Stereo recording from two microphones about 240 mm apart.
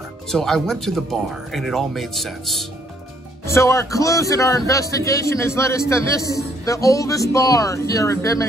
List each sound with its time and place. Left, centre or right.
0.3 s speech: centre
3.4 s a man's voice: centre